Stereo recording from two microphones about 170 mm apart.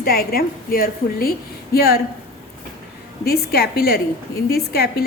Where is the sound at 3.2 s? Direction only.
65° left (ahead or behind).